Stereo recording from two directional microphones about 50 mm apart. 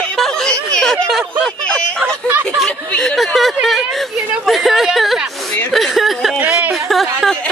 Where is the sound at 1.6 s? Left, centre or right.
Left.